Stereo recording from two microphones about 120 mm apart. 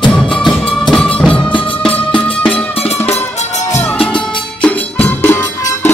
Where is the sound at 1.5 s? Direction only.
45° left (ahead or behind).